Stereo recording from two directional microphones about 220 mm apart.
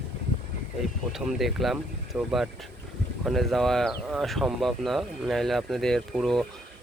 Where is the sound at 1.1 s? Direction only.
Centre (ahead or behind).